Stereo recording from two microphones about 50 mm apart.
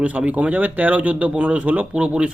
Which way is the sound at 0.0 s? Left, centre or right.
Right.